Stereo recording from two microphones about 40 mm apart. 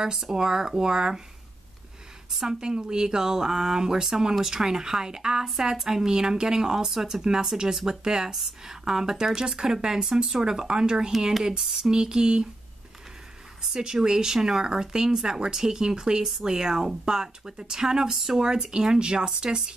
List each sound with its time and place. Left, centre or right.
0.2 s speech: centre
2.3 s speech: centre
11.9 s speech: centre
13.6 s speech: centre